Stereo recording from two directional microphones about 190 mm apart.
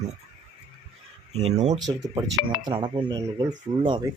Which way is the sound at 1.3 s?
35° right (ahead or behind).